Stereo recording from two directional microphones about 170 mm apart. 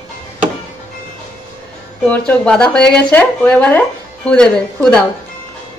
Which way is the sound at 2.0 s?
5° left (ahead or behind).